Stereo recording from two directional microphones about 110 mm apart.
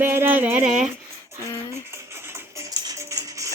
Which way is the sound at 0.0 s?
20° right (ahead or behind).